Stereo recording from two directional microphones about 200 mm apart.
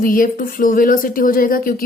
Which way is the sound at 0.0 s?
45° left (ahead or behind).